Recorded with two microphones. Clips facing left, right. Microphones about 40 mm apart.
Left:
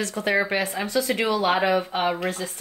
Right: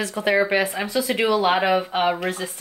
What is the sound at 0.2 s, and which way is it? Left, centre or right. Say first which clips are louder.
Speech: right 4 dB; right.